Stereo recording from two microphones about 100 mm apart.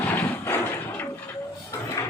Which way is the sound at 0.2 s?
20° left (ahead or behind).